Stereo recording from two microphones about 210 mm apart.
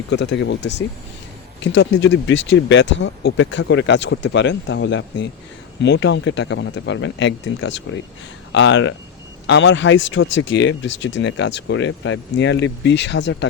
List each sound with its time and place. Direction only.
0.1 s speech: 55° left (ahead or behind)